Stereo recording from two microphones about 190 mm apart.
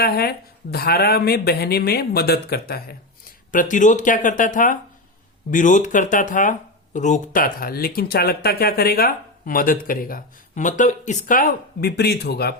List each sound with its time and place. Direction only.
0.0 s speech: 55° left (ahead or behind)
3.5 s speech: 45° left (ahead or behind)